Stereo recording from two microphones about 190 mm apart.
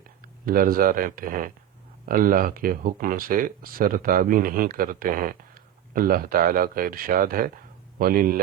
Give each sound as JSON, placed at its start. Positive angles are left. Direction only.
{"t": 0.4, "sound": "speech", "side_deg": -50}